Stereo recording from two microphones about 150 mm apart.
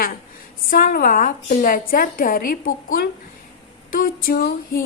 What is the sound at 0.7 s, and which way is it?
A woman's voice, 75° left (ahead or behind).